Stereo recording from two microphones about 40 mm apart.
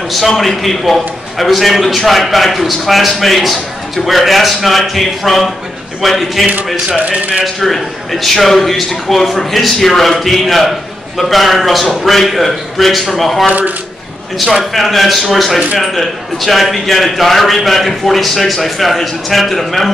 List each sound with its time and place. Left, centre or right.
0.4 s a man's voice: centre
6.9 s speech: right
7.6 s a man's voice: centre